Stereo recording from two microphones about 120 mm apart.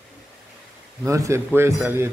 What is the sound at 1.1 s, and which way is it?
A man's voice, 25° right (ahead or behind).